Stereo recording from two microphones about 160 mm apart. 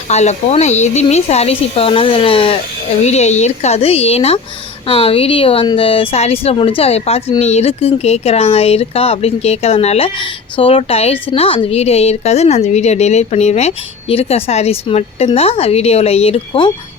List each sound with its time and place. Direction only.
0.1 s speech: 45° left (ahead or behind)